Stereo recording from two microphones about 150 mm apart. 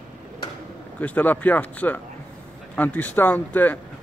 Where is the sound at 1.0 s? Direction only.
10° left (ahead or behind).